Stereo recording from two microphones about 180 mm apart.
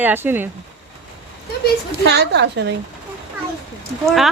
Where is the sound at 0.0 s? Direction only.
10° right (ahead or behind).